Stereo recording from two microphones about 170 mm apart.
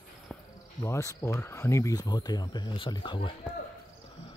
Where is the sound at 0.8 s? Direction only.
15° left (ahead or behind).